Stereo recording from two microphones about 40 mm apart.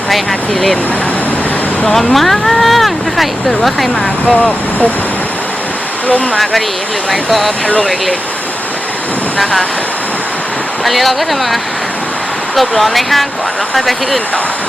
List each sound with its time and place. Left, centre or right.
0.1 s speech: centre
1.8 s speech: centre
4.3 s speech: left
6.3 s speech: centre
10.8 s speech: centre